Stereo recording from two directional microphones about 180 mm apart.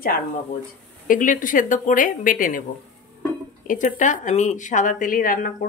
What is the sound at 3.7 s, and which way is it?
A woman's voice, 45° left (ahead or behind).